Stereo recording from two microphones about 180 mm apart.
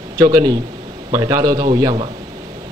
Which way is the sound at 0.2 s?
20° right (ahead or behind).